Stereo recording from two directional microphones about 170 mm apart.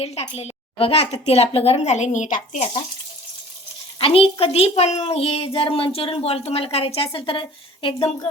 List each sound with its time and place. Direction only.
0.0 s a woman's voice: 40° left (ahead or behind)
3.9 s a woman's voice: 35° left (ahead or behind)